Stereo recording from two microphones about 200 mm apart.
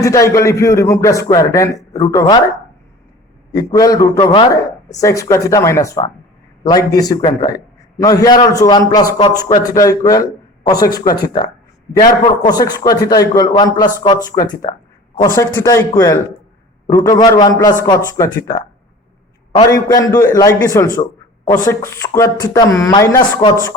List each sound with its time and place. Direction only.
0.0 s speech: 15° left (ahead or behind)
3.5 s a man's voice: 15° left (ahead or behind)